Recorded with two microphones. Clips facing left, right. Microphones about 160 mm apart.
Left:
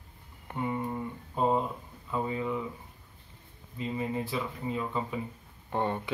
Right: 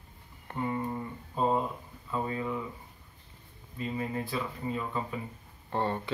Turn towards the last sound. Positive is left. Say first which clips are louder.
# even
turn(degrees=10)  # may be behind; listen again after turning